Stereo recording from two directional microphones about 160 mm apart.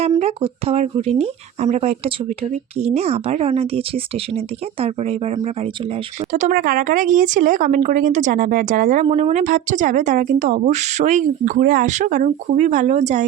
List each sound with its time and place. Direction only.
0.2 s speech: 40° right (ahead or behind)
6.3 s speech: 55° right (ahead or behind)